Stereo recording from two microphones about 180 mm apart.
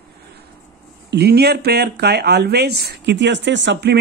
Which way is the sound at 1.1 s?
65° right (ahead or behind).